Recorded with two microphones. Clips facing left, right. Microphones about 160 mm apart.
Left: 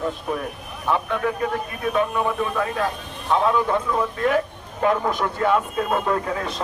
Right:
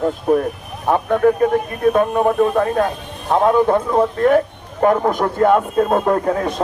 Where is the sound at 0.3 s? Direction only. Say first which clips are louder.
Right 11 dB; 40° right (ahead or behind).